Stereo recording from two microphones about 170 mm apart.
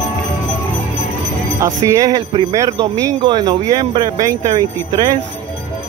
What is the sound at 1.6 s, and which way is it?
Speech, 20° right (ahead or behind).